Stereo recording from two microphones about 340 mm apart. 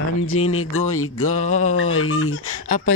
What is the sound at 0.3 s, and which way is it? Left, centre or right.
Speech, left.